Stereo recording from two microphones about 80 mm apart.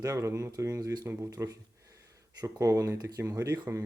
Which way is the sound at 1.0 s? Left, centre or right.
Right.